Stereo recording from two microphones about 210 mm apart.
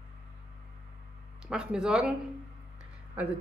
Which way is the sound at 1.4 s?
5° right (ahead or behind).